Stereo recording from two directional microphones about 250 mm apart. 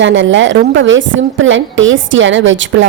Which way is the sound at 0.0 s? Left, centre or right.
Right.